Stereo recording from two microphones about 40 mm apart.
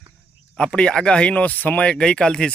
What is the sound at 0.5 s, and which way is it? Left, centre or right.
Speech, left.